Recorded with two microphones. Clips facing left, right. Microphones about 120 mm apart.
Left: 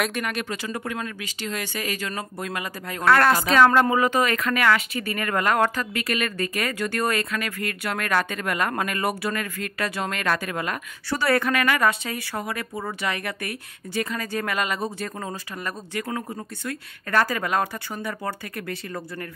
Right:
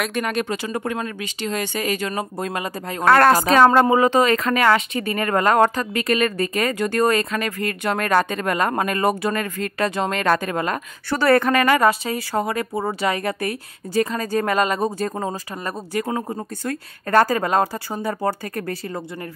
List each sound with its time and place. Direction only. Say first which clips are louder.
0.2 s a woman's voice: right 5 dB; 30° right (ahead or behind)
3.1 s speech: right 4 dB; 40° right (ahead or behind)
11.1 s speech: right 5 dB; 55° right (ahead or behind)
11.5 s a woman's voice: right 5 dB; 30° right (ahead or behind)
12.3 s speech: right 10 dB; 40° right (ahead or behind)